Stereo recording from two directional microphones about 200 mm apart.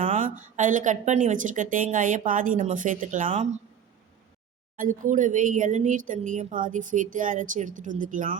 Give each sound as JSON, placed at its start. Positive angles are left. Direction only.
{"t": 0.0, "sound": "a sound", "side_deg": -35}
{"t": 0.5, "sound": "speech", "side_deg": -40}
{"t": 4.8, "sound": "speech", "side_deg": -40}